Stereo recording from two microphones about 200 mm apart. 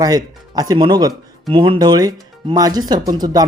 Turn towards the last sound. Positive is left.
turn(degrees=-20)  # may be behind; listen again after turning